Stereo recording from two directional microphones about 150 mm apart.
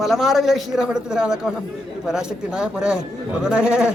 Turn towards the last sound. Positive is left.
turn(degrees=-5)  # may be behind; listen again after turning